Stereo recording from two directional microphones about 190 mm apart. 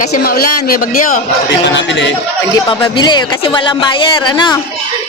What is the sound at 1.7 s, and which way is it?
Speech, 70° left (ahead or behind).